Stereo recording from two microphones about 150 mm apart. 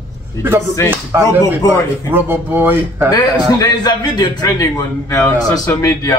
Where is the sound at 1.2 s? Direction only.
20° left (ahead or behind).